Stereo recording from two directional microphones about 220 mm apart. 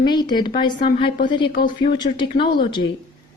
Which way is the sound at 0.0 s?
20° left (ahead or behind).